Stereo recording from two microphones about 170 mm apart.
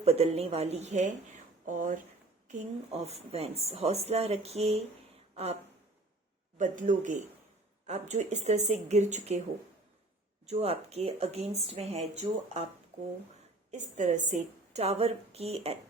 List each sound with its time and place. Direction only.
0.0 s a woman's voice: 35° right (ahead or behind)
2.5 s a woman's voice: 40° right (ahead or behind)
6.6 s a woman's voice: 50° right (ahead or behind)
10.4 s a woman's voice: 40° right (ahead or behind)
13.7 s a woman's voice: 45° right (ahead or behind)